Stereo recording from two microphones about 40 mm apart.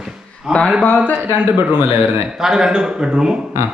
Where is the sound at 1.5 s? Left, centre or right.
Right.